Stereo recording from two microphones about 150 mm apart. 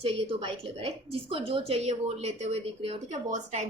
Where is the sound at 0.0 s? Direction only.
40° right (ahead or behind).